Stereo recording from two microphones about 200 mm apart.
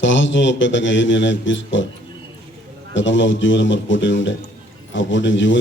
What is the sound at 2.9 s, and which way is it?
A man's voice, 65° left (ahead or behind).